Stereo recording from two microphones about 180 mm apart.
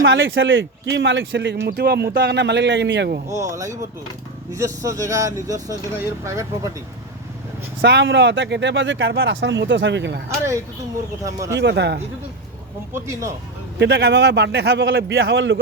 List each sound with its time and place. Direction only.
0.0 s a man's voice: 90° right
3.5 s speech: 15° right (ahead or behind)
7.8 s speech: 80° right
10.2 s speech: 15° right (ahead or behind)
11.5 s a man's voice: 70° right (ahead or behind)
12.9 s speech: 15° right (ahead or behind)
13.7 s a man's voice: 70° right (ahead or behind); by 15.5 s 90° right